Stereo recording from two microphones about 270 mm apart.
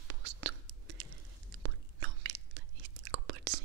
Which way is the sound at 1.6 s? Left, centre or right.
Right.